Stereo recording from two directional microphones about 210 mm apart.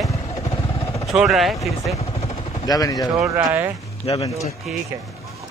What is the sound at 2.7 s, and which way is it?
Speech, 20° left (ahead or behind).